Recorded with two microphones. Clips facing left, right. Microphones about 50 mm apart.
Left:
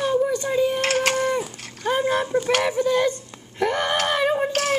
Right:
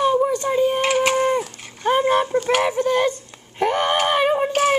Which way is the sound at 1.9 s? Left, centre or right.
Right.